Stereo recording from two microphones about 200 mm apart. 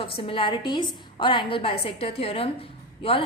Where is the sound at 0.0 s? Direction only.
25° left (ahead or behind).